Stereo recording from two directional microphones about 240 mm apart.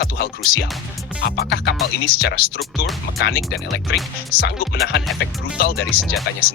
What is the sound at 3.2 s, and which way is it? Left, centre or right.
Speech, left.